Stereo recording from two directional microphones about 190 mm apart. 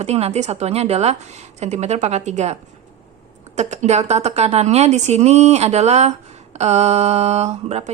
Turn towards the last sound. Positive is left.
turn(degrees=-35)  # may be behind; listen again after turning